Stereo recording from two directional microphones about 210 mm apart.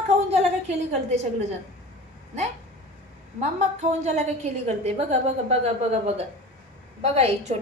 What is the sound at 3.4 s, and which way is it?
A woman's voice, 30° right (ahead or behind).